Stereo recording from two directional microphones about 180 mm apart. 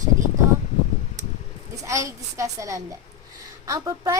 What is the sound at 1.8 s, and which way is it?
A woman's voice, 15° right (ahead or behind).